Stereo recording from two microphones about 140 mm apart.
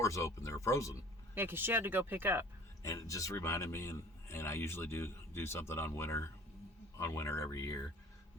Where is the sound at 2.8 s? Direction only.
20° left (ahead or behind).